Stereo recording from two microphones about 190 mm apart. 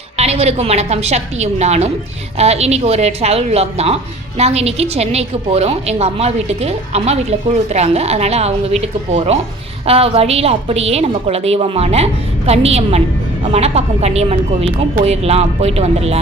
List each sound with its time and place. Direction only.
0.2 s a woman's voice: 35° right (ahead or behind)